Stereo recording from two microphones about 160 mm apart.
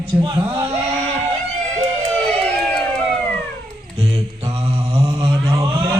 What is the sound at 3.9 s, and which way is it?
Mantra, 40° right (ahead or behind).